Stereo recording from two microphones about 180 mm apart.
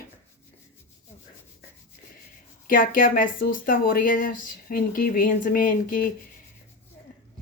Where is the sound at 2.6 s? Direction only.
50° left (ahead or behind).